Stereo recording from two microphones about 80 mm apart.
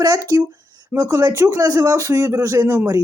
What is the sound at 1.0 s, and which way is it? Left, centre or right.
Speech, right.